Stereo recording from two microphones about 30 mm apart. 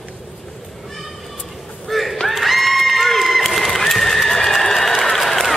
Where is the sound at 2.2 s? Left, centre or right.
Centre.